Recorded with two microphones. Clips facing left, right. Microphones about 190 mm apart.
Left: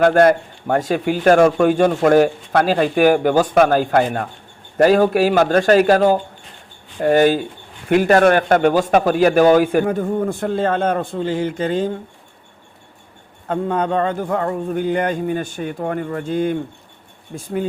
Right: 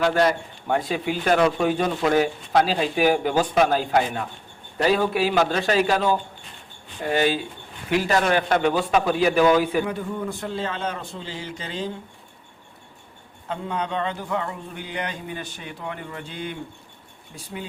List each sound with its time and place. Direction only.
0.0 s speech: 55° left (ahead or behind)
13.5 s speech: 50° left (ahead or behind)